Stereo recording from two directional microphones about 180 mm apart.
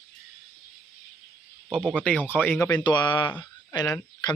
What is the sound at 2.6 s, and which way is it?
Speech, 20° left (ahead or behind).